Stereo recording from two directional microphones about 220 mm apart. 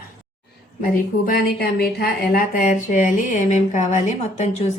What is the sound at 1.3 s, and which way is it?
Speech, 40° left (ahead or behind).